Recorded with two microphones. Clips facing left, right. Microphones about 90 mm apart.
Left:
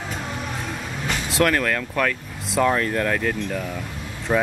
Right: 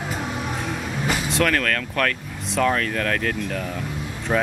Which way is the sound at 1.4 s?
10° left (ahead or behind).